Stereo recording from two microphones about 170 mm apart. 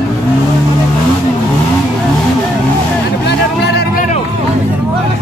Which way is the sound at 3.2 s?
80° left.